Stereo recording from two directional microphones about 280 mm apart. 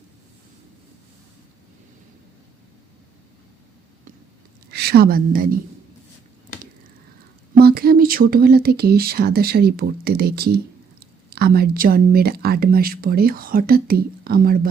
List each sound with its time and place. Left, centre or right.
4.7 s a woman's voice: right
7.6 s speech: right